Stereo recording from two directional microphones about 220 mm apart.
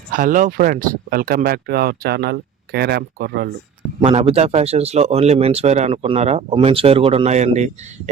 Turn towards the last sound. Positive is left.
turn(degrees=-30)  # may be behind; listen again after turning